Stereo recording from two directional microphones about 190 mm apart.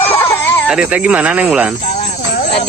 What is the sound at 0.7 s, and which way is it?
Speech, 5° right (ahead or behind).